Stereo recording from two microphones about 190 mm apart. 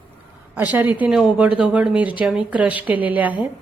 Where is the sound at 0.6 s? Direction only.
10° right (ahead or behind).